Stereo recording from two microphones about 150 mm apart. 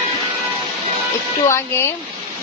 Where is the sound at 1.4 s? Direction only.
15° left (ahead or behind).